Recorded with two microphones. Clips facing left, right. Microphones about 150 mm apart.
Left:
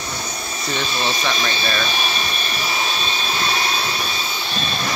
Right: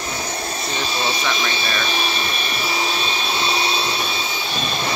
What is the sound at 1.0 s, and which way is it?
Speech, 10° right (ahead or behind).